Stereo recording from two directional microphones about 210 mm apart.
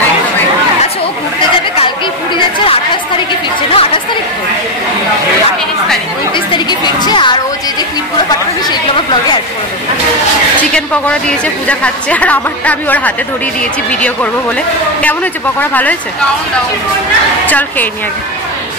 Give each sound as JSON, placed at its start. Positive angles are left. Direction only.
{"t": 2.3, "sound": "chatter", "side_deg": 25}
{"t": 6.3, "sound": "chatter", "side_deg": 20}
{"t": 10.7, "sound": "a woman's voice", "side_deg": 5}
{"t": 15.7, "sound": "a woman's voice", "side_deg": 5}
{"t": 17.5, "sound": "a woman's voice", "side_deg": 10}